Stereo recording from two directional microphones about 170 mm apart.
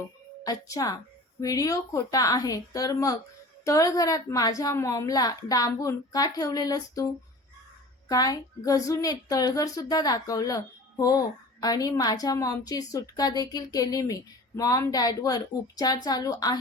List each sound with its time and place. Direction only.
0.4 s a woman's voice: 20° left (ahead or behind)